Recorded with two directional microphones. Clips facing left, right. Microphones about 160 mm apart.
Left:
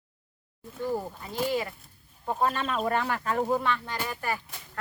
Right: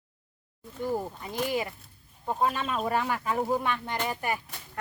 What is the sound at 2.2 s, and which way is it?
Speech, 5° right (ahead or behind).